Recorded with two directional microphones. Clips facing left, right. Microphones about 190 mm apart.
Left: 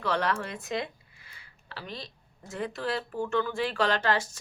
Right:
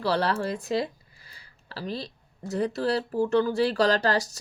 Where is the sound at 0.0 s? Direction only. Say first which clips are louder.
Right 4 dB; 35° right (ahead or behind).